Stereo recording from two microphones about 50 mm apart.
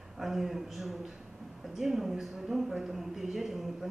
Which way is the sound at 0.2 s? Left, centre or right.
Centre.